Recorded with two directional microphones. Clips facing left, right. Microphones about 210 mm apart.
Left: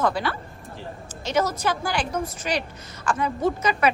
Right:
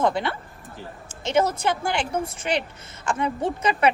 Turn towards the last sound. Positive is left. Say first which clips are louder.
# even
turn(degrees=-30)  # may be behind; listen again after turning